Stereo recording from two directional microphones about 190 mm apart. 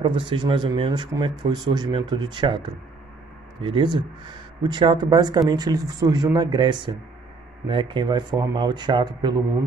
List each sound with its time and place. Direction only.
0.0 s speech: 25° right (ahead or behind)